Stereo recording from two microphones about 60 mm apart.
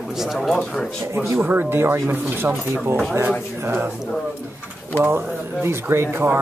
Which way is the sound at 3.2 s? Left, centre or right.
Right.